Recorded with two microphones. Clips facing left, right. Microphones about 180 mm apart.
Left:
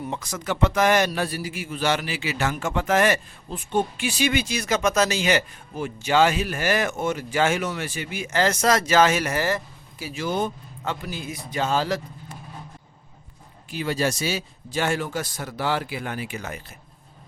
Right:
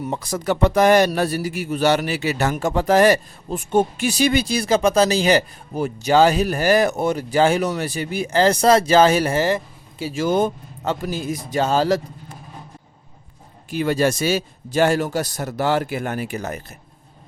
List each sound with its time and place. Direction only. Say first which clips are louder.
0.1 s a man's voice: right 9 dB; 35° right (ahead or behind)
10.2 s a man's voice: right 7 dB; 45° right (ahead or behind)
13.7 s a man's voice: right 6 dB; 50° right (ahead or behind)